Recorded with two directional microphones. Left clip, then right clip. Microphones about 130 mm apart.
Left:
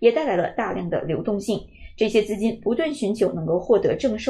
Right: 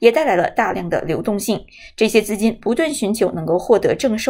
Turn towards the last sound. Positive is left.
turn(degrees=-25)  # may be behind; listen again after turning